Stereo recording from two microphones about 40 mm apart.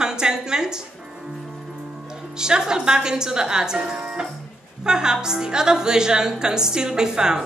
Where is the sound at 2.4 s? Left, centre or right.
Centre.